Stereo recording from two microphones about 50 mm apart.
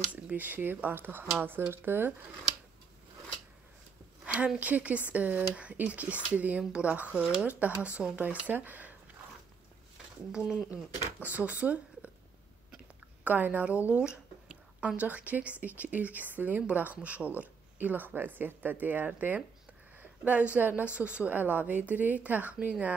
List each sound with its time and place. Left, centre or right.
0.1 s a woman's voice: right
4.6 s a woman's voice: right
10.3 s speech: centre
10.7 s speech: right
13.2 s a woman's voice: right
13.8 s a sound: right
15.0 s a woman's voice: right